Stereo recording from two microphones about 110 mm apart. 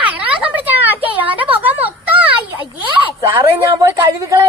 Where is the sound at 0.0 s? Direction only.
15° right (ahead or behind).